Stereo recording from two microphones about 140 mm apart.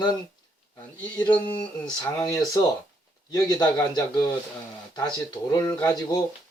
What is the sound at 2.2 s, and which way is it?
Speech, 25° left (ahead or behind).